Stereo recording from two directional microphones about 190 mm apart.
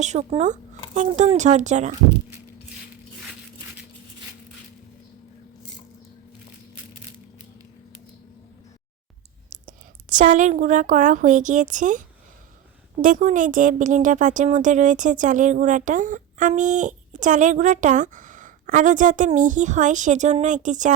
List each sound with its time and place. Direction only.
0.0 s a woman's voice: 35° right (ahead or behind)
9.5 s a woman's voice: 45° right (ahead or behind)